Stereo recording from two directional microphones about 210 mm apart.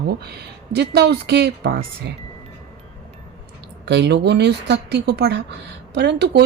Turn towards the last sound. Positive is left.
turn(degrees=-55)  # may be behind; listen again after turning